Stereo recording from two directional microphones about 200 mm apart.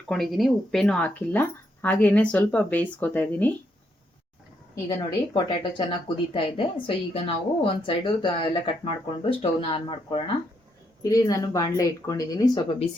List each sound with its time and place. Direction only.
0.1 s speech: centre (ahead or behind)
4.9 s speech: 25° left (ahead or behind)